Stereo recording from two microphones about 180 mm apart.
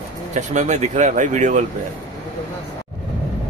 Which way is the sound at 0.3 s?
40° right (ahead or behind).